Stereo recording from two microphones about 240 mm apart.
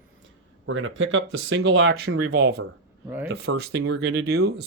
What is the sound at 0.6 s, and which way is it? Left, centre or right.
Speech, right.